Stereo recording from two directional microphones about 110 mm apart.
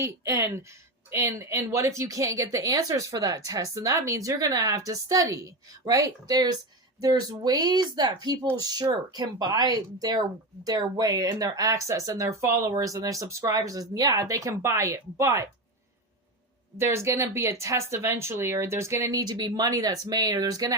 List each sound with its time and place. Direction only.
0.0 s speech: 25° right (ahead or behind)
16.7 s speech: 25° right (ahead or behind)